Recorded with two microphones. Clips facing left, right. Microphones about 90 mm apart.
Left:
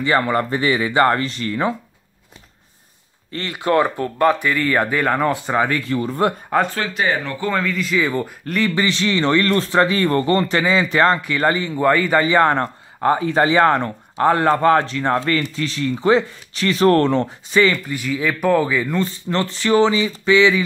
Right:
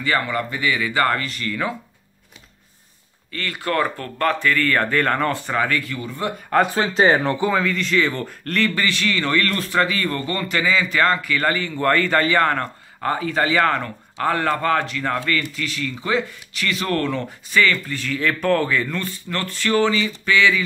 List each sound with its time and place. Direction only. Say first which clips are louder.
0.3 s speech: left 5 dB; 35° left (ahead or behind)
3.3 s speech: left 5 dB; 20° left (ahead or behind)
5.9 s speech: left 7 dB; 45° left (ahead or behind)
6.7 s speech: right 4 dB; 25° right (ahead or behind)
7.5 s speech: even; centre (ahead or behind); by 20.6 s 20° left (ahead or behind)